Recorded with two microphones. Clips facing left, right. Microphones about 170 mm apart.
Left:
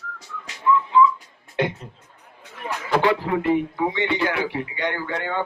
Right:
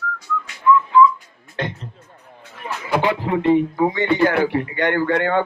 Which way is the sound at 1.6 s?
10° left (ahead or behind).